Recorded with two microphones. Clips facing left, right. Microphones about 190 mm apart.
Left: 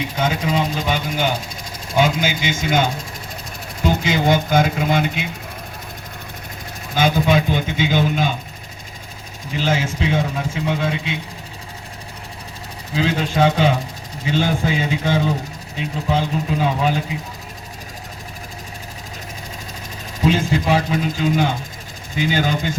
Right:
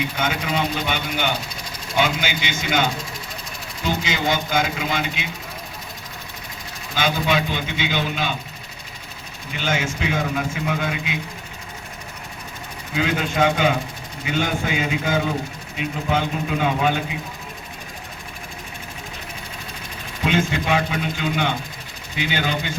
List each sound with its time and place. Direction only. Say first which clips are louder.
0.2 s speech: left 5 dB; 35° left (ahead or behind)
6.9 s speech: left 5 dB; 50° left (ahead or behind)
9.5 s a man's voice: left 3 dB; 30° left (ahead or behind)
12.9 s speech: left 2 dB; 30° left (ahead or behind)
20.2 s speech: left 3 dB; 35° left (ahead or behind)